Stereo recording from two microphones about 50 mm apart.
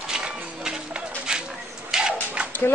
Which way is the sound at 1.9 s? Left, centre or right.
Centre.